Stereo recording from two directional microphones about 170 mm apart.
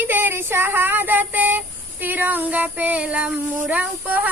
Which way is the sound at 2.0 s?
10° right (ahead or behind).